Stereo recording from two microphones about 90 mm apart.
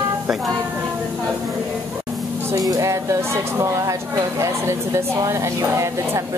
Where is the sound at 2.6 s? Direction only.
40° right (ahead or behind).